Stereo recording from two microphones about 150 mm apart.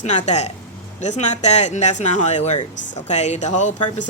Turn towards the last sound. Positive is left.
turn(degrees=55)  # may be behind; listen again after turning